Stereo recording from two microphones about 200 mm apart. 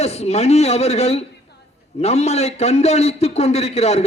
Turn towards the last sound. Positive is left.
turn(degrees=30)  # may be behind; listen again after turning